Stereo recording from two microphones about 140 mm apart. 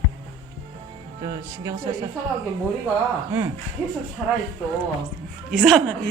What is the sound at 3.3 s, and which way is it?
Speech, 15° right (ahead or behind).